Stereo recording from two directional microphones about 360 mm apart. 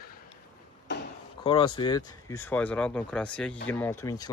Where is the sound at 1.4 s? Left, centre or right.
Centre.